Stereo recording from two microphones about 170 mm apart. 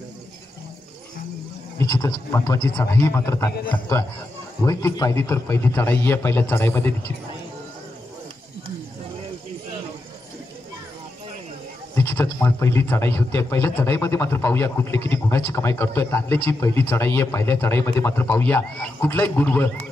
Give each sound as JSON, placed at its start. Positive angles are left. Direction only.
{"t": 1.8, "sound": "speech", "side_deg": 15}
{"t": 4.6, "sound": "a man's voice", "side_deg": 20}
{"t": 11.9, "sound": "speech", "side_deg": 10}